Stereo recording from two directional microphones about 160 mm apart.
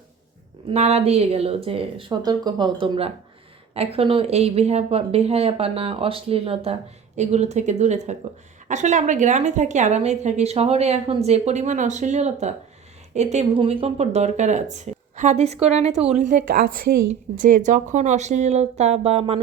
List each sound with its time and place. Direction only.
0.7 s a woman's voice: 40° right (ahead or behind); by 16.9 s 70° right (ahead or behind)
17.3 s a woman's voice: 55° right (ahead or behind)